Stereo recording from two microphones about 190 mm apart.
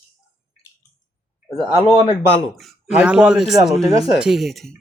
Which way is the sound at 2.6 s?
Centre (ahead or behind).